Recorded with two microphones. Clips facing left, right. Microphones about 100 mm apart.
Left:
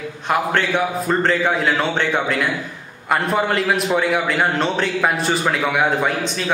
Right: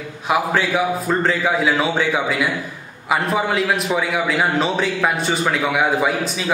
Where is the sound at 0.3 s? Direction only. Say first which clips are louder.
Even; 5° right (ahead or behind).